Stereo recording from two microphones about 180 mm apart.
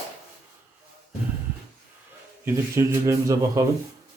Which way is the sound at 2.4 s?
15° right (ahead or behind).